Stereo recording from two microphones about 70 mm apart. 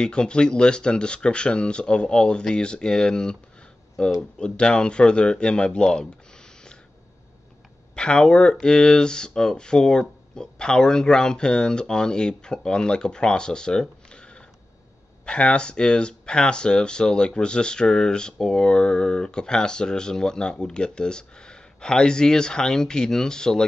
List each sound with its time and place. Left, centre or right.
0.0 s speech: centre
4.4 s speech: centre
7.9 s speech: centre